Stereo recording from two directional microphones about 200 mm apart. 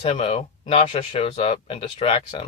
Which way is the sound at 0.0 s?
25° left (ahead or behind).